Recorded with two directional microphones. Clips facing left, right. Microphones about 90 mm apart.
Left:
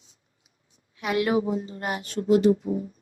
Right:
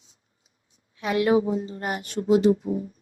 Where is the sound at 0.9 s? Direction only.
30° right (ahead or behind).